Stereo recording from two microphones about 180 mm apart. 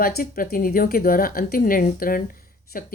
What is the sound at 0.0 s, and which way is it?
Speech, 55° left (ahead or behind).